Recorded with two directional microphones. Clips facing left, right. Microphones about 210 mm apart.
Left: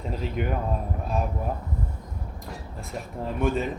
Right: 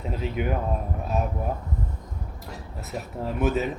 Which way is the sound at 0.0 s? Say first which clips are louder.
Right 1 dB; 5° right (ahead or behind).